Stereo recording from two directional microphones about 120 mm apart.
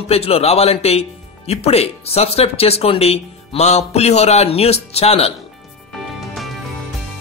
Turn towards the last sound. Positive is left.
turn(degrees=0)  # may be behind; listen again after turning